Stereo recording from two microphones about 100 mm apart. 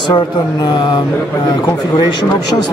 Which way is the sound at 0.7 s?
45° left (ahead or behind).